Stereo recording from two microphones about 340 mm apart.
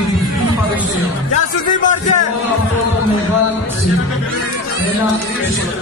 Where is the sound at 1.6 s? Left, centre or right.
Left.